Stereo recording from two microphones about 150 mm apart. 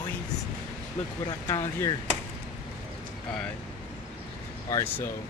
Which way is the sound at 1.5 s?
25° left (ahead or behind).